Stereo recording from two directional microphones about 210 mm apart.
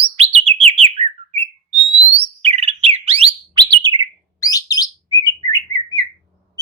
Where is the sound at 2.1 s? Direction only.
30° right (ahead or behind).